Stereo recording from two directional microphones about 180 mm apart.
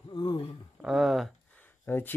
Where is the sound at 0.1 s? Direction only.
25° left (ahead or behind).